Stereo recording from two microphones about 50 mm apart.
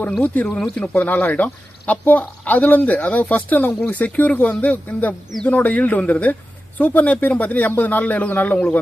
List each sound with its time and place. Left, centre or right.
0.2 s speech: left
0.6 s speech: centre
1.0 s speech: left